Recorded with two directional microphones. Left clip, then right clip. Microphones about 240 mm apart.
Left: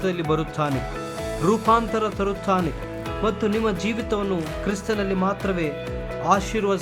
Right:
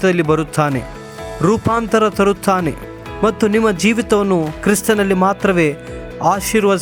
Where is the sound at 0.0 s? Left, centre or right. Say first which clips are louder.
Right 9 dB; right.